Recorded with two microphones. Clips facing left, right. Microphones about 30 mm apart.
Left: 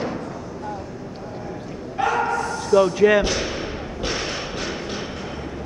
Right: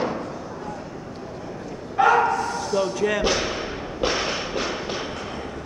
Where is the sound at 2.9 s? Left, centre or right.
Centre.